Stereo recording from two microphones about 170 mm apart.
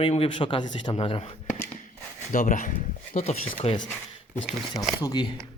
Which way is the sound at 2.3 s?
50° left (ahead or behind).